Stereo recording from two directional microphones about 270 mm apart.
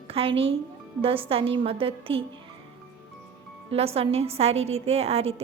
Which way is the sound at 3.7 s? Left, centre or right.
Right.